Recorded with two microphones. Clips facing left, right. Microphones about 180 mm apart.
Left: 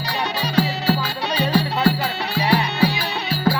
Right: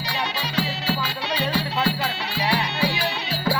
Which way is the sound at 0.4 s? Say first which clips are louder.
Left 9 dB; 45° left (ahead or behind).